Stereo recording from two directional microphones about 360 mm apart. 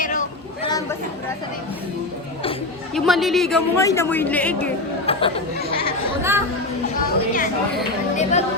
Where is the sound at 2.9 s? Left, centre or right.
Centre.